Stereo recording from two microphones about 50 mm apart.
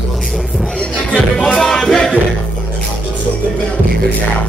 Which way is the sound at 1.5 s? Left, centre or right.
Centre.